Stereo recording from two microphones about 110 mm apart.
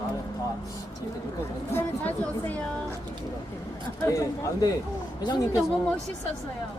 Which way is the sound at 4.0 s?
30° left (ahead or behind).